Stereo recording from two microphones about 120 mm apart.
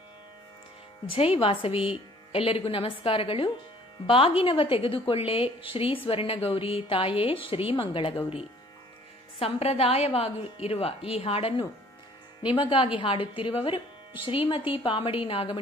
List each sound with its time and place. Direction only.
1.1 s a woman's voice: 50° left (ahead or behind)
12.4 s a woman's voice: 45° left (ahead or behind)